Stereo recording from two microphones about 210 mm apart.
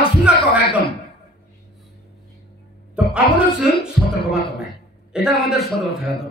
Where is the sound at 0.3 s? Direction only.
5° right (ahead or behind).